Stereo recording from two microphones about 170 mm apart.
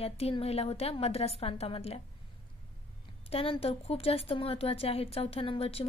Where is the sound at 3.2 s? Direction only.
35° left (ahead or behind).